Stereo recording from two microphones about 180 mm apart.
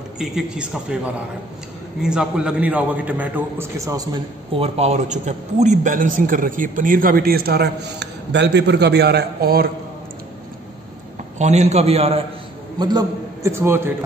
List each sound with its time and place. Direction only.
0.2 s a man's voice: 5° right (ahead or behind); by 4.2 s 20° right (ahead or behind)
4.6 s a man's voice: 35° right (ahead or behind); by 9.7 s 60° right (ahead or behind)
11.3 s a man's voice: 40° right (ahead or behind)
12.7 s a man's voice: 20° right (ahead or behind)